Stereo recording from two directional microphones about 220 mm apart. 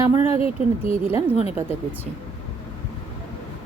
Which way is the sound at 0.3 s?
25° left (ahead or behind).